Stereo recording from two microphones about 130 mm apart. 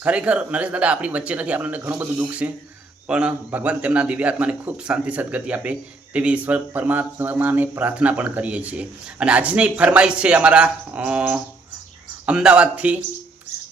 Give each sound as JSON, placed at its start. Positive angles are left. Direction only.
{"t": 0.0, "sound": "speech", "side_deg": -10}